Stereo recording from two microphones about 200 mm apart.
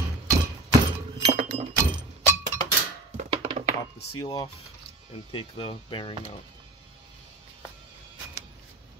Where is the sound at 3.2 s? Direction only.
35° right (ahead or behind).